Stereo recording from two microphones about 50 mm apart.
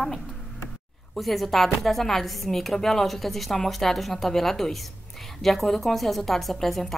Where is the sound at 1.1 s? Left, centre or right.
Centre.